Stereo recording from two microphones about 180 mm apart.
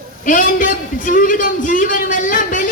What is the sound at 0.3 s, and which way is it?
A man's voice, 50° left (ahead or behind).